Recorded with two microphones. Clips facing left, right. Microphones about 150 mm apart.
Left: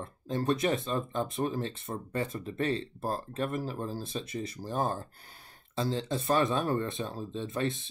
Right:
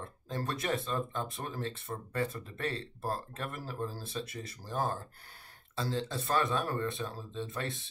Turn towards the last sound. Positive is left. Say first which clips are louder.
# left 6 dB
turn(degrees=20)  # may be behind; listen again after turning